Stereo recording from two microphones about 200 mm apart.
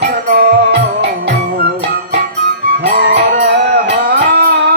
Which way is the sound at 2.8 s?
55° right (ahead or behind).